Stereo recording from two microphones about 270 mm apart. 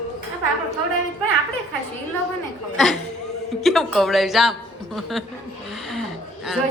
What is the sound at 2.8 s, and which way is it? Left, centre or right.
A man's voice, centre.